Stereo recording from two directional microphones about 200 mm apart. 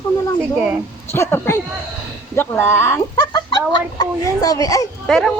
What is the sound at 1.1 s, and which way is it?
A woman's voice, 10° left (ahead or behind).